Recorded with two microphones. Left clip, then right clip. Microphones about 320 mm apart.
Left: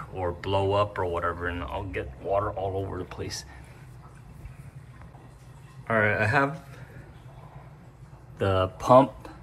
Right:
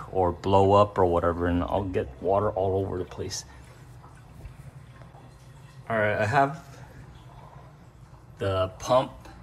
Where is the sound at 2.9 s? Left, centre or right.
Centre.